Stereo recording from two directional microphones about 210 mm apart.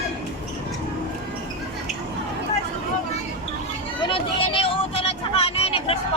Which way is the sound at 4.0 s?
25° left (ahead or behind).